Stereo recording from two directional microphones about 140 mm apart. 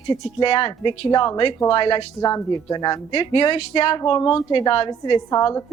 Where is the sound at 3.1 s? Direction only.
40° left (ahead or behind).